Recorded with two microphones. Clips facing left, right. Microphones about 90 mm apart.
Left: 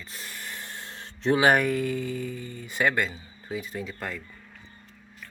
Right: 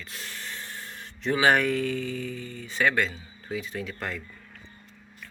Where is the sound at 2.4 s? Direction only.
15° left (ahead or behind).